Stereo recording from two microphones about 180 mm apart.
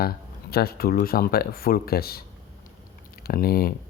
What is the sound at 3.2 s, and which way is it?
Speech, 55° left (ahead or behind).